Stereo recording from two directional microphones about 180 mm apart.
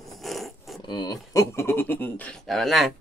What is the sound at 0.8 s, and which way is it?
Speech, 25° left (ahead or behind).